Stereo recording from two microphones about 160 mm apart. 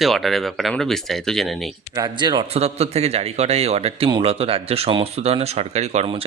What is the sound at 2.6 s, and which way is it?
Speech, 40° right (ahead or behind).